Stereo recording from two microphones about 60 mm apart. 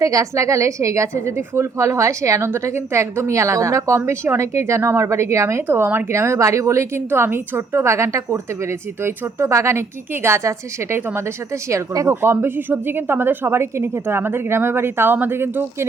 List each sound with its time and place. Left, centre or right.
0.0 s a woman's voice: right
5.6 s a woman's voice: right
7.1 s a woman's voice: right